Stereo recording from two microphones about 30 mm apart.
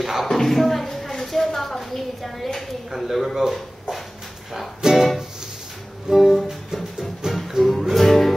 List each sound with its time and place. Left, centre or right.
0.0 s speech: centre
0.3 s a sound: centre
3.1 s speech: centre
4.8 s music: centre
6.1 s music: centre
7.0 s music: centre
7.9 s music: centre